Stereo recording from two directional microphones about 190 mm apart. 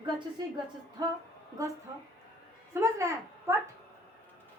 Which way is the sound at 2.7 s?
15° right (ahead or behind).